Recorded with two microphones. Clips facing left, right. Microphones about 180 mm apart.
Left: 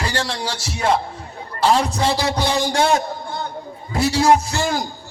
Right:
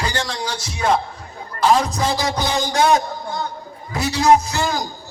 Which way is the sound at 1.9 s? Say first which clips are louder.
Left 1 dB; 30° left (ahead or behind).